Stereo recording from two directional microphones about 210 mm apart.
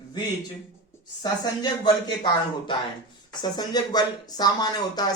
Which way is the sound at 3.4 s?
20° left (ahead or behind).